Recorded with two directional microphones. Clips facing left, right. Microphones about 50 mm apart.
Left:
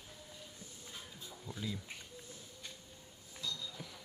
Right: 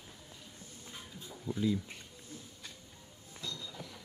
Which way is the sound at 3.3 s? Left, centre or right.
Right.